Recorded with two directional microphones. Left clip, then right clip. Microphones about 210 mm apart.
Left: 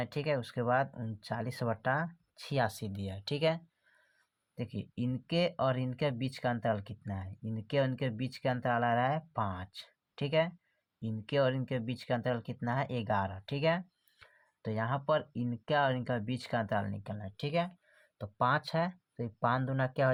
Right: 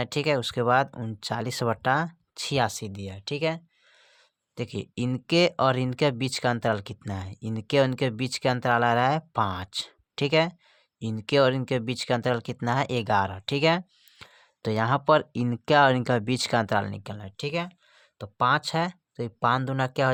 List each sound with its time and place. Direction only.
0.0 s speech: 40° right (ahead or behind); by 3.6 s 25° right (ahead or behind)
4.5 s speech: 45° right (ahead or behind)